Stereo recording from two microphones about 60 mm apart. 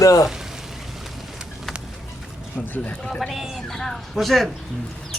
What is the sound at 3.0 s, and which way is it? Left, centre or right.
Speech, centre.